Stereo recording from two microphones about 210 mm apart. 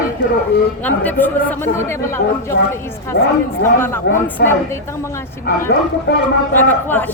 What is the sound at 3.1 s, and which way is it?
A woman's voice, 45° left (ahead or behind).